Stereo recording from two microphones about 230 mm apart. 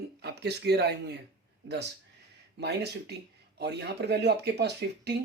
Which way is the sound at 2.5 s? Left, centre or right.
Right.